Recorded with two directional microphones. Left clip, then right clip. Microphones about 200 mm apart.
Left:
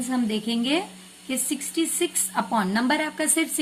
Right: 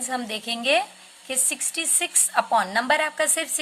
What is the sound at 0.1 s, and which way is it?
Speech, 30° right (ahead or behind).